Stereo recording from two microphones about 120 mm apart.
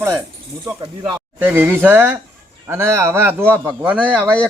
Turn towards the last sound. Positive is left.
turn(degrees=-10)  # may be behind; listen again after turning